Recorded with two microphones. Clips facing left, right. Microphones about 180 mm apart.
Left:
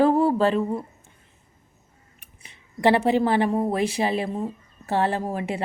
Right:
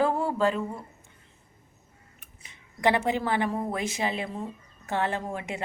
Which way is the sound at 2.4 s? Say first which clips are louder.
Left 5 dB; 20° right (ahead or behind).